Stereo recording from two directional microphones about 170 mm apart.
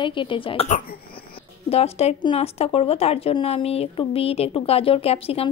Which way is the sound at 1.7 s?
35° left (ahead or behind).